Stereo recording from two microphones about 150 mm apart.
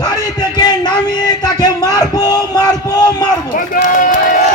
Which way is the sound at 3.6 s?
65° left (ahead or behind).